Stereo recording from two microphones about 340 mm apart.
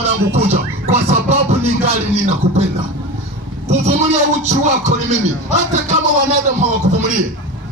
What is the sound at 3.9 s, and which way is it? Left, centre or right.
A man's voice, centre.